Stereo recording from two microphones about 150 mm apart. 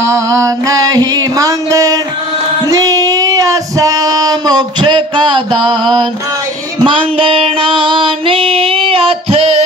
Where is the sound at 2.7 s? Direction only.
20° right (ahead or behind).